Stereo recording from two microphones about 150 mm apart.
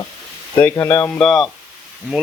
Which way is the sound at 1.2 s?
Centre (ahead or behind).